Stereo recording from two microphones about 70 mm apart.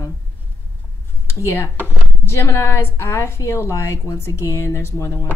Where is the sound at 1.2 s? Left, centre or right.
Left.